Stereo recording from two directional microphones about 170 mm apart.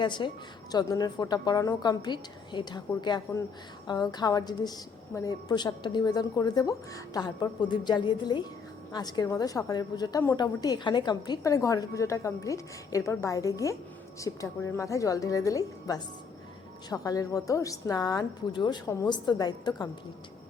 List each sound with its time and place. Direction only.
0.0 s a woman's voice: 25° left (ahead or behind)